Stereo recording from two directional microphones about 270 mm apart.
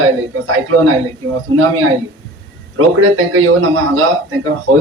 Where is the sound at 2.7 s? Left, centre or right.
Right.